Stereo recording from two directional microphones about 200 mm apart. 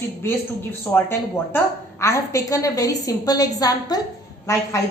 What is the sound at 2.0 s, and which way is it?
A woman's voice, 15° left (ahead or behind).